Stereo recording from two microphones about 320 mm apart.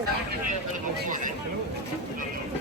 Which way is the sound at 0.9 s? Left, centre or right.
Right.